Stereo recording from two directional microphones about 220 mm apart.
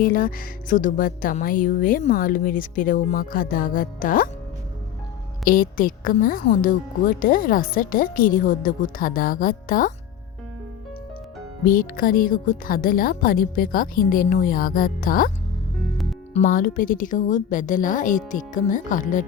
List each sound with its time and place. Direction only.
0.0 s a woman's voice: 40° left (ahead or behind)
5.5 s a woman's voice: 40° left (ahead or behind)
11.6 s a woman's voice: 40° left (ahead or behind)
16.3 s a woman's voice: 40° left (ahead or behind)